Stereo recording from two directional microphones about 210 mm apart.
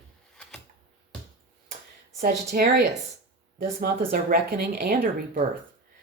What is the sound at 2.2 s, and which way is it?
Speech, 45° right (ahead or behind).